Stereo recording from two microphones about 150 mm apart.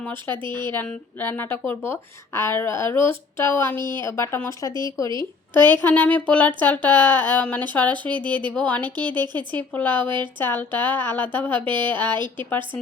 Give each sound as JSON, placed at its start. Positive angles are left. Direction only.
{"t": 0.0, "sound": "speech", "side_deg": 15}
{"t": 0.4, "sound": "speech", "side_deg": -30}
{"t": 0.7, "sound": "speech", "side_deg": 10}
{"t": 3.8, "sound": "speech", "side_deg": -30}
{"t": 4.0, "sound": "speech", "side_deg": 15}
{"t": 4.7, "sound": "speech", "side_deg": -30}
{"t": 5.5, "sound": "speech", "side_deg": 10}
{"t": 8.1, "sound": "speech", "side_deg": -30}
{"t": 8.5, "sound": "speech", "side_deg": 10}
{"t": 9.0, "sound": "speech", "side_deg": -30}
{"t": 9.5, "sound": "speech", "side_deg": 10}
{"t": 12.1, "sound": "speech", "side_deg": -30}
{"t": 12.5, "sound": "speech", "side_deg": 15}